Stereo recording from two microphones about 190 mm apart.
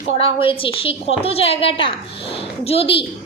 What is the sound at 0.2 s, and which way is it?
A woman's voice, 30° left (ahead or behind).